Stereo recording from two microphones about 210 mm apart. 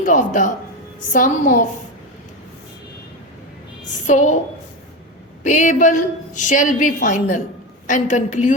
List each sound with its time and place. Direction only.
0.0 s a woman's voice: 40° left (ahead or behind)
4.0 s a woman's voice: 35° left (ahead or behind)
5.4 s a woman's voice: 35° left (ahead or behind)